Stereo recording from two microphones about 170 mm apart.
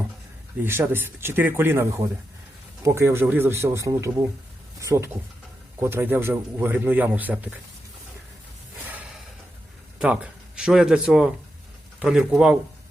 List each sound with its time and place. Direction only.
0.6 s a man's voice: 15° right (ahead or behind)
10.0 s speech: 5° right (ahead or behind)